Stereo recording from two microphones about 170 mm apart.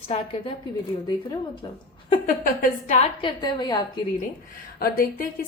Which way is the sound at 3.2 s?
25° left (ahead or behind).